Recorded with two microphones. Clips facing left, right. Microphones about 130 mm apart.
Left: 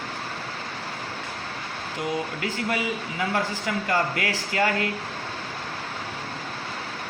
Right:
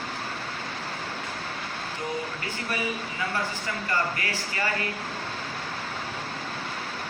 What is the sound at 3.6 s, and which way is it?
Speech, 90° left.